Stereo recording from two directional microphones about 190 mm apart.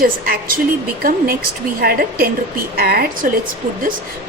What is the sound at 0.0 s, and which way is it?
Speech, 50° right (ahead or behind).